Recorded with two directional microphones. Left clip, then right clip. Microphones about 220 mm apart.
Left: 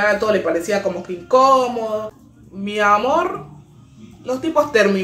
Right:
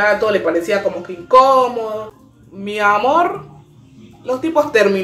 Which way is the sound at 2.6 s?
Centre (ahead or behind).